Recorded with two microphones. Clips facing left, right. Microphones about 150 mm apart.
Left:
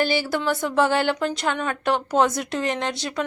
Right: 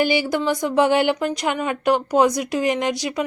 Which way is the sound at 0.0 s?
15° right (ahead or behind).